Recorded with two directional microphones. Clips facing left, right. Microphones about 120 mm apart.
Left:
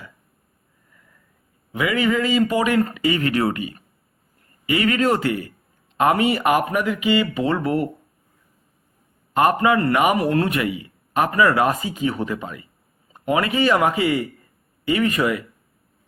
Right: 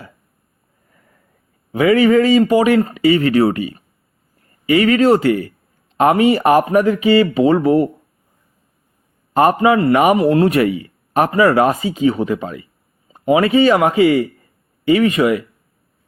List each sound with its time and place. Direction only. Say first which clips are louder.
1.7 s speech: right 9 dB; 30° right (ahead or behind)
9.3 s a man's voice: right 4 dB; 30° right (ahead or behind)
9.6 s speech: right 5 dB; 20° right (ahead or behind)